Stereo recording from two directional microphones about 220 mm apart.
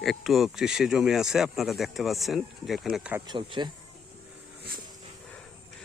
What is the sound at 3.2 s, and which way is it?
Speech, 20° right (ahead or behind).